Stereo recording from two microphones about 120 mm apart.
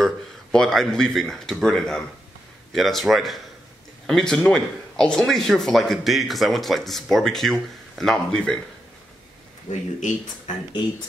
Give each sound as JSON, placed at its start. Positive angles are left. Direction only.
{"t": 0.0, "sound": "speech", "side_deg": 5}
{"t": 9.7, "sound": "speech", "side_deg": 80}